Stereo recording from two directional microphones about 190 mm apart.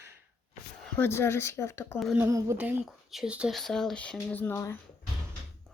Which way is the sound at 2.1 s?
15° right (ahead or behind).